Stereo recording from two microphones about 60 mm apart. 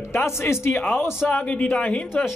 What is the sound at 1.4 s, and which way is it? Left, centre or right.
Speech, left.